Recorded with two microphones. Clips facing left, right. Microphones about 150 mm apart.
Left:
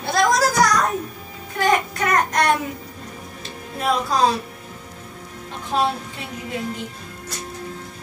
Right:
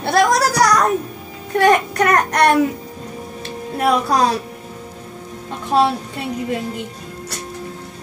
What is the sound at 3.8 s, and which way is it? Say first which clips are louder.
Speech: right 5 dB; 65° right (ahead or behind).